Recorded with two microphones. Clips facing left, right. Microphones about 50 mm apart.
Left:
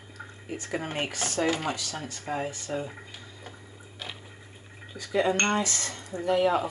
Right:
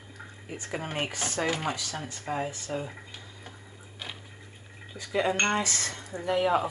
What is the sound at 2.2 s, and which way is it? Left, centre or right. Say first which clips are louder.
Speech: even; centre.